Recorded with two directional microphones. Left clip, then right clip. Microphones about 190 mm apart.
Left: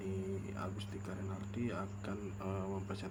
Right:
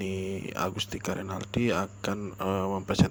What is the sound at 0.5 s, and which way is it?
Speech, 45° right (ahead or behind).